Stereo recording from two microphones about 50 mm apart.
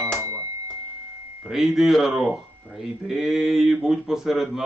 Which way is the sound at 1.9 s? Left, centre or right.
Centre.